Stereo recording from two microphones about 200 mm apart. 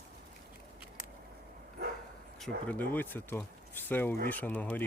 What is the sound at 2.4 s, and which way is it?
Speech, 10° left (ahead or behind).